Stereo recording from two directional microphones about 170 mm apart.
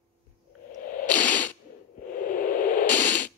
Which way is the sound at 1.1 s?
10° left (ahead or behind).